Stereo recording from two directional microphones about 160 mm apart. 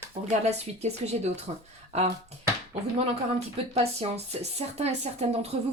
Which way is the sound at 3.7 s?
40° right (ahead or behind).